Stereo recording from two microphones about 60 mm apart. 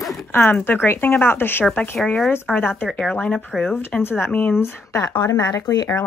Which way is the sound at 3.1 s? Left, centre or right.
Left.